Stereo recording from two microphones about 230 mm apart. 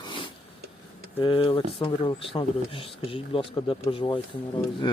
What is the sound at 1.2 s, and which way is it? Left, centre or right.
Speech, left.